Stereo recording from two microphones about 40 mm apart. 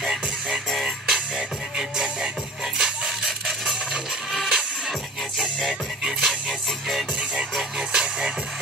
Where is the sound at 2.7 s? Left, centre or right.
Centre.